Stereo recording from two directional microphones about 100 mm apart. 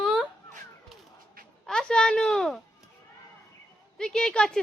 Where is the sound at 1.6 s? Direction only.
5° left (ahead or behind).